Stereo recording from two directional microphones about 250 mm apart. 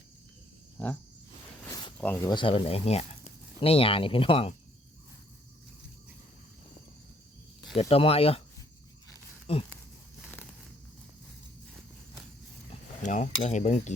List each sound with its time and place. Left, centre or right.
2.0 s speech: centre
7.8 s speech: left
9.5 s speech: left
13.0 s speech: left